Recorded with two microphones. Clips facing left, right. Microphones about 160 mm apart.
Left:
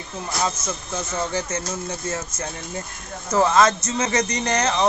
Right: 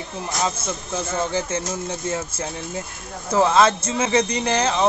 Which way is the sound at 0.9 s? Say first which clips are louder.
Right 2 dB; 5° right (ahead or behind).